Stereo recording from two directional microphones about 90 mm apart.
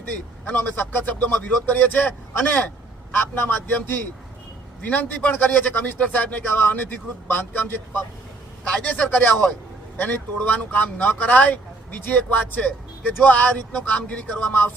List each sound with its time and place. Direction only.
0.4 s a man's voice: 20° left (ahead or behind)
3.2 s a man's voice: 20° left (ahead or behind)